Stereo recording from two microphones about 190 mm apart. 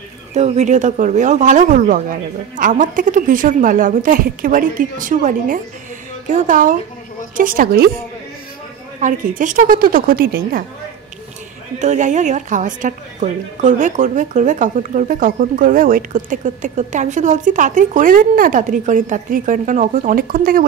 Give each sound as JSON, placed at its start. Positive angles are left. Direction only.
{"t": 0.3, "sound": "speech", "side_deg": -35}
{"t": 9.0, "sound": "speech", "side_deg": -45}
{"t": 11.8, "sound": "a woman's voice", "side_deg": -40}